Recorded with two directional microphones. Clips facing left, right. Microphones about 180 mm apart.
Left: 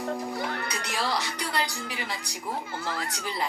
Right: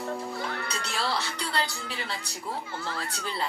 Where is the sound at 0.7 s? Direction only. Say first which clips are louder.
Left 1 dB; 15° left (ahead or behind).